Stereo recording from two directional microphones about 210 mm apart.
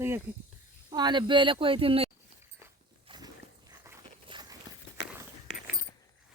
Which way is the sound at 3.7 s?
20° right (ahead or behind).